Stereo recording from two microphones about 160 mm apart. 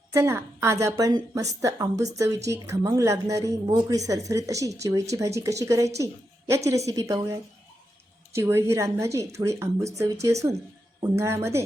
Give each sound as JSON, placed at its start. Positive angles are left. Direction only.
{"t": 0.1, "sound": "a woman's voice", "side_deg": -15}